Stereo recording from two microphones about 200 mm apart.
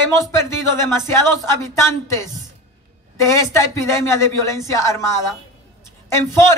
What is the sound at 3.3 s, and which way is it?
Speech, 15° left (ahead or behind).